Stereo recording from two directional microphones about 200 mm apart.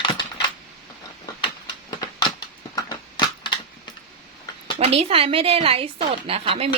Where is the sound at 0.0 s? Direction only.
25° left (ahead or behind).